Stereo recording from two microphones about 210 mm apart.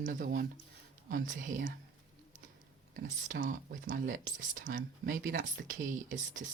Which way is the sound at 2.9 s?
40° right (ahead or behind).